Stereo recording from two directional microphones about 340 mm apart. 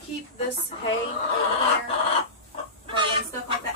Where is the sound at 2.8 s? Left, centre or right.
Centre.